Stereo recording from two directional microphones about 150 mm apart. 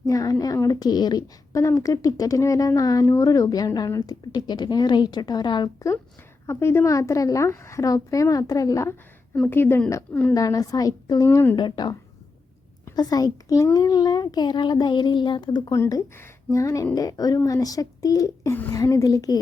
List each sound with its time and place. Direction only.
0.1 s a woman's voice: 25° left (ahead or behind)
10.3 s a woman's voice: 25° left (ahead or behind)
11.5 s a woman's voice: 30° left (ahead or behind)
15.8 s a woman's voice: 20° left (ahead or behind)